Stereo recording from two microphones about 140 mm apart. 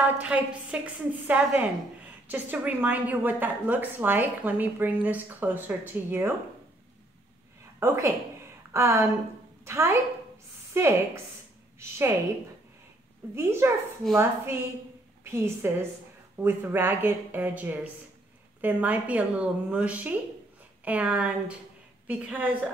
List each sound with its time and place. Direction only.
0.0 s a woman's voice: 10° right (ahead or behind)
7.8 s a woman's voice: 20° right (ahead or behind)
13.3 s a woman's voice: 20° right (ahead or behind)